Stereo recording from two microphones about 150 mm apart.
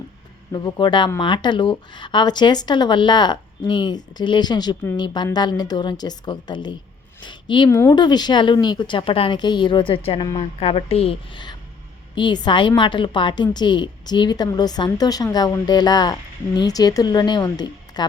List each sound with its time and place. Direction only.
0.5 s a woman's voice: 30° left (ahead or behind)